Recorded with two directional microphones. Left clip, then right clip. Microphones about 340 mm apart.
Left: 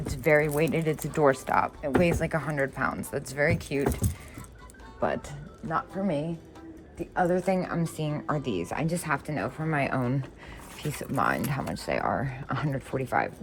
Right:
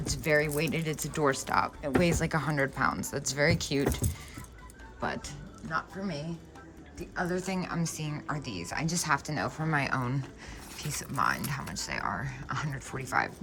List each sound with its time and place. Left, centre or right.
0.0 s speech: centre
7.2 s speech: centre